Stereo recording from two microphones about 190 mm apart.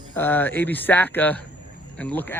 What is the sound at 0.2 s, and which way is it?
Speech, 10° left (ahead or behind).